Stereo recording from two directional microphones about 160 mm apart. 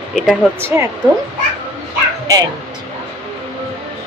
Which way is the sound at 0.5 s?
15° right (ahead or behind).